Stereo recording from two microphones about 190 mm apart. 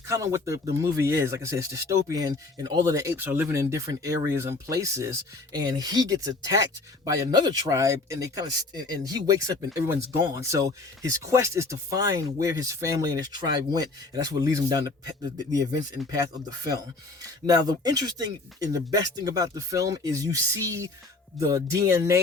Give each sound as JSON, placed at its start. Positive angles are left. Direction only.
{"t": 0.1, "sound": "speech", "side_deg": -15}